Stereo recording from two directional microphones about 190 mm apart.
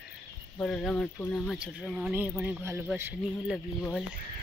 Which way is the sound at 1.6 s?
5° right (ahead or behind).